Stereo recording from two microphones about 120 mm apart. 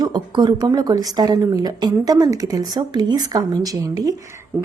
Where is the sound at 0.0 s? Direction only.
35° right (ahead or behind).